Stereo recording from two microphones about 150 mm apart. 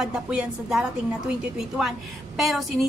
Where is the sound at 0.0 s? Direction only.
5° right (ahead or behind).